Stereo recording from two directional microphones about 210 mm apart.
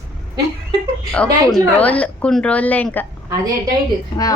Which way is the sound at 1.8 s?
5° left (ahead or behind).